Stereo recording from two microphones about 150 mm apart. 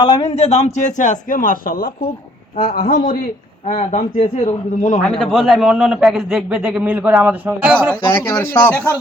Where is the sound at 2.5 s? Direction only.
45° left (ahead or behind).